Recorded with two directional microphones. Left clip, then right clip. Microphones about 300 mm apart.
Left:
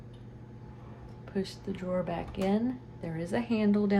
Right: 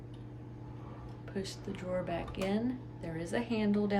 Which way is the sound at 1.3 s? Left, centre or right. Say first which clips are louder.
Left 5 dB; centre.